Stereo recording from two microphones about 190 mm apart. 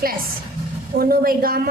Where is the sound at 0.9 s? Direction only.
50° right (ahead or behind).